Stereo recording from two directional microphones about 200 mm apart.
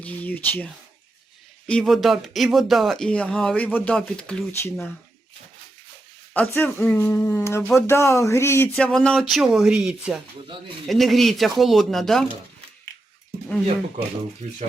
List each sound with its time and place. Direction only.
0.0 s speech: 5° left (ahead or behind)
6.3 s speech: 10° left (ahead or behind)